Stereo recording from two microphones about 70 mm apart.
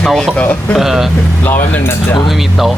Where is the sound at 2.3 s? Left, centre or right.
Centre.